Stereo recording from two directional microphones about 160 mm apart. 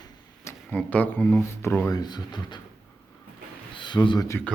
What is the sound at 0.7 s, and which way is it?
Speech, 10° left (ahead or behind).